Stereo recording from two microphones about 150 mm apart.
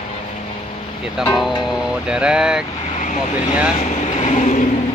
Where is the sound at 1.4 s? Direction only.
5° right (ahead or behind).